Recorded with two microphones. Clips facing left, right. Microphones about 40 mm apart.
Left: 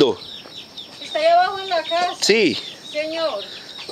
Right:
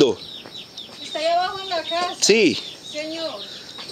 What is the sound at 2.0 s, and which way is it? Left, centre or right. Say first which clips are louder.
Speech: right 1 dB; centre.